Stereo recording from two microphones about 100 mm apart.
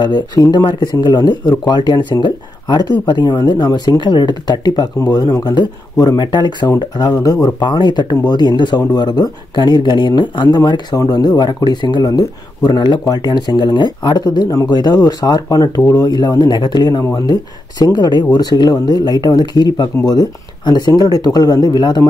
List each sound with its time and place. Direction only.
0.0 s speech: 45° left (ahead or behind)
6.2 s speech: 50° left (ahead or behind)